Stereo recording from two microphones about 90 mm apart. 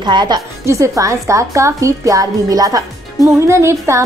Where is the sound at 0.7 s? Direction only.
35° right (ahead or behind).